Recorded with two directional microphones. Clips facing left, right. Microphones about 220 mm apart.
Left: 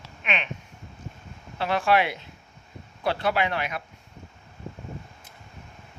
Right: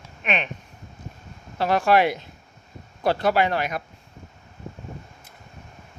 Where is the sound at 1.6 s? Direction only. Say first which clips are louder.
Right 4 dB; 40° right (ahead or behind).